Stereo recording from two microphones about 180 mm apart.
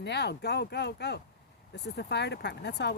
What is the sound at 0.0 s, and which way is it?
Speech, 70° left (ahead or behind).